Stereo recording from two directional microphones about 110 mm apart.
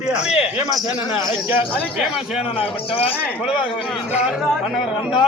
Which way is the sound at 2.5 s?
55° left (ahead or behind).